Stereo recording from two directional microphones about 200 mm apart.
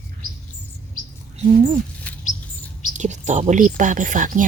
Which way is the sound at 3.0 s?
35° right (ahead or behind).